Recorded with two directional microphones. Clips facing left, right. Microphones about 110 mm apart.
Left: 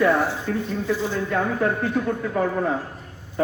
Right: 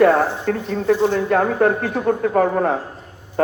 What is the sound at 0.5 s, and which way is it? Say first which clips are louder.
A man's voice: right 6 dB; 60° right (ahead or behind).